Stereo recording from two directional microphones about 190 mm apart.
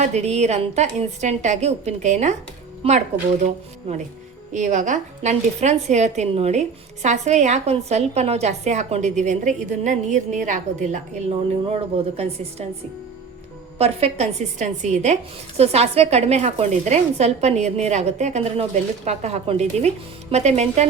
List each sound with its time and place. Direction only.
0.1 s a woman's voice: 35° right (ahead or behind)
3.4 s a woman's voice: 40° right (ahead or behind)
13.7 s a woman's voice: 30° right (ahead or behind)